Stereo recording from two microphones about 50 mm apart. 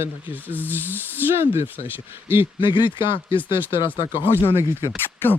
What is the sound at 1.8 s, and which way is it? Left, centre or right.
Speech, right.